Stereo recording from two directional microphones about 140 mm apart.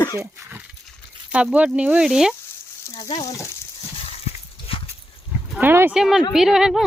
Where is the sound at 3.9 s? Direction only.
45° left (ahead or behind).